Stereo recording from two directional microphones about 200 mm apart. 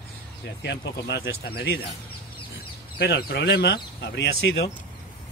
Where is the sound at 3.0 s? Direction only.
55° left (ahead or behind).